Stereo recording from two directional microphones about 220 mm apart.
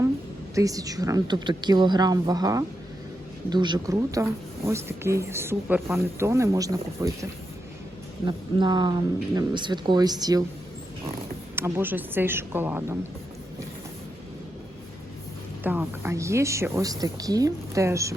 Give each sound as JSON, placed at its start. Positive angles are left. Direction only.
{"t": 0.5, "sound": "speech", "side_deg": -15}
{"t": 11.5, "sound": "speech", "side_deg": -10}
{"t": 15.6, "sound": "speech", "side_deg": -10}